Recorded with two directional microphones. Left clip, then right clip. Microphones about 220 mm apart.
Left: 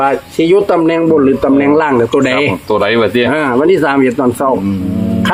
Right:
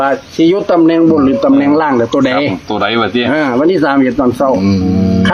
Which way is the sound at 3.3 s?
5° right (ahead or behind).